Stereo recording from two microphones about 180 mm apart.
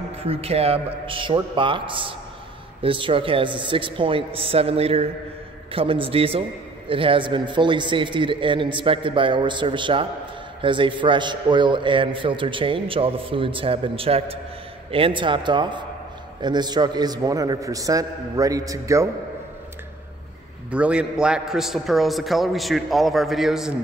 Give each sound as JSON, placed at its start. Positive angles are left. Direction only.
{"t": 0.3, "sound": "a man's voice", "side_deg": -35}
{"t": 20.7, "sound": "a man's voice", "side_deg": -5}